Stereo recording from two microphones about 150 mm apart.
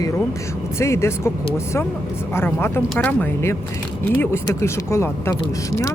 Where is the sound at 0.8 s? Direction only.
20° left (ahead or behind).